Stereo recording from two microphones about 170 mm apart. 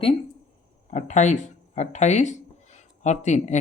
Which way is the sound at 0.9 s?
45° left (ahead or behind).